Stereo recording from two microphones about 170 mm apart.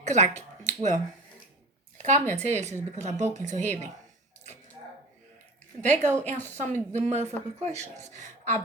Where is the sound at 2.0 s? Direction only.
45° right (ahead or behind).